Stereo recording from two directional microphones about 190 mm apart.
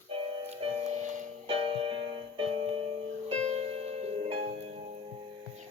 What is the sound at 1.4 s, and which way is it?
Music, 30° right (ahead or behind).